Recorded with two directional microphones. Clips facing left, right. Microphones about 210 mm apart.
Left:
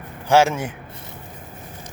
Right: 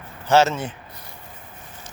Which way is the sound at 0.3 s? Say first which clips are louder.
Left 1 dB; 10° left (ahead or behind).